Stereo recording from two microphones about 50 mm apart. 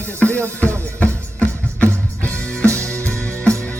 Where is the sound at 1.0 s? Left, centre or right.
Left.